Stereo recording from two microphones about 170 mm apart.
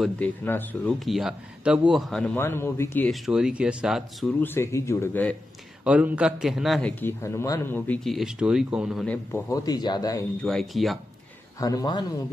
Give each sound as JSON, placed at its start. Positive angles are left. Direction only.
{"t": 0.0, "sound": "speech", "side_deg": 10}
{"t": 0.9, "sound": "a man's voice", "side_deg": 0}
{"t": 3.1, "sound": "a man's voice", "side_deg": -5}
{"t": 4.4, "sound": "speech", "side_deg": 15}
{"t": 5.9, "sound": "a man's voice", "side_deg": -5}
{"t": 7.0, "sound": "a man's voice", "side_deg": 15}
{"t": 9.0, "sound": "speech", "side_deg": 10}
{"t": 9.5, "sound": "speech", "side_deg": 20}
{"t": 10.4, "sound": "a man's voice", "side_deg": 0}
{"t": 11.6, "sound": "speech", "side_deg": 25}